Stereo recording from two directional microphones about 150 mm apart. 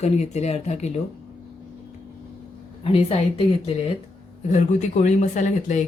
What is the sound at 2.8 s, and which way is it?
Speech, 40° left (ahead or behind).